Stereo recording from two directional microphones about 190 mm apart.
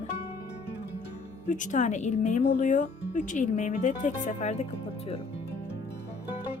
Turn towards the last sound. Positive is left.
turn(degrees=35)  # may be behind; listen again after turning